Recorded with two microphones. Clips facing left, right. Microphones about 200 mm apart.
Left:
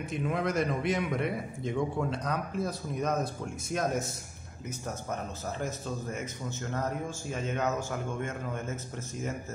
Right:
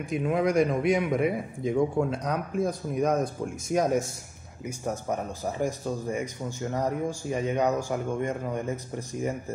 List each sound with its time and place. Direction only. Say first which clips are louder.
0.2 s a man's voice: right 6 dB; 5° right (ahead or behind)
3.7 s speech: right 7 dB; 55° right (ahead or behind)
4.6 s speech: right 6 dB; 15° right (ahead or behind)